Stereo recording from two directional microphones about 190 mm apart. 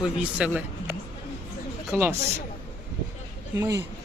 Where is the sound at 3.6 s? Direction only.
15° right (ahead or behind).